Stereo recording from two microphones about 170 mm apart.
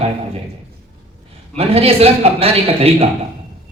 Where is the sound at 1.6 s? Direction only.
35° right (ahead or behind).